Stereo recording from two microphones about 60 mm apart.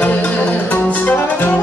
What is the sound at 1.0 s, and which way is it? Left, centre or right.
Music, left.